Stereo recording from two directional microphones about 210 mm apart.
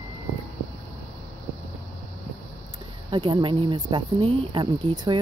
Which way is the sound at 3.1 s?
25° right (ahead or behind).